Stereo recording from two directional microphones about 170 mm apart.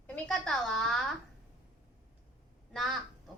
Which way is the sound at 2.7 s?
Centre (ahead or behind).